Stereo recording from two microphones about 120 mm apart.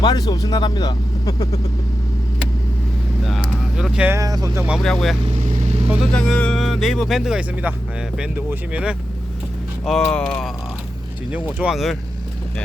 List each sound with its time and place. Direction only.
0.0 s speech: 35° left (ahead or behind)
3.2 s vehicle: centre (ahead or behind)
4.1 s speech: 30° right (ahead or behind)
4.8 s speech: 5° left (ahead or behind)
5.3 s vehicle: 65° right (ahead or behind)
6.1 s speech: 10° left (ahead or behind)
11.6 s speech: centre (ahead or behind)